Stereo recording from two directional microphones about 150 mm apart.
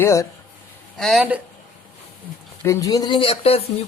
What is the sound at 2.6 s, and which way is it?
A woman's voice, 20° left (ahead or behind).